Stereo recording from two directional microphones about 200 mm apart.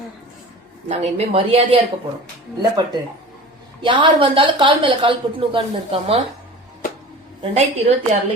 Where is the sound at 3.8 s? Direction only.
25° right (ahead or behind).